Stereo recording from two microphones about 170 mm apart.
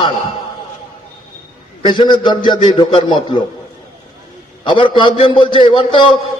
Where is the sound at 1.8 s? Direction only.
25° left (ahead or behind).